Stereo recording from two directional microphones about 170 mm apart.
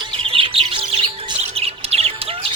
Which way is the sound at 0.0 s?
30° right (ahead or behind).